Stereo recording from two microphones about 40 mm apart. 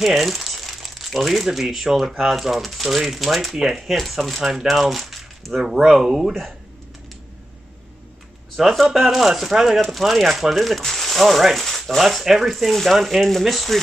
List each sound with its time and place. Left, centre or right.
0.0 s speech: centre
4.5 s speech: centre
4.7 s a sound: centre
5.4 s speech: centre
5.9 s speech: centre
8.5 s speech: centre